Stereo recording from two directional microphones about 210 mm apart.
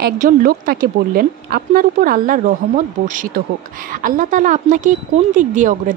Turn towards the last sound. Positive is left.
turn(degrees=-35)  # may be behind; listen again after turning